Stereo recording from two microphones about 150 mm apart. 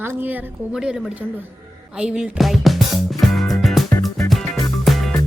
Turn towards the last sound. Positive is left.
turn(degrees=0)  # may be behind; listen again after turning